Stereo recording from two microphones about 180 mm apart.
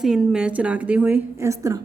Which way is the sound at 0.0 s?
5° right (ahead or behind).